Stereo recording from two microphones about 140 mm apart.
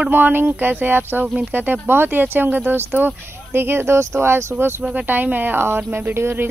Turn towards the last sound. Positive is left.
turn(degrees=-15)  # may be behind; listen again after turning